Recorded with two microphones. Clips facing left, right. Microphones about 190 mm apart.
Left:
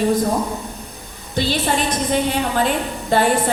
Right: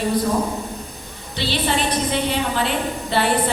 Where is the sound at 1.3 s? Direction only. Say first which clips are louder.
Left 3 dB; 45° left (ahead or behind).